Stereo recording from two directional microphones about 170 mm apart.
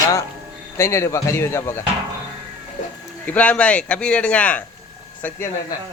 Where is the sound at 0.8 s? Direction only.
15° left (ahead or behind).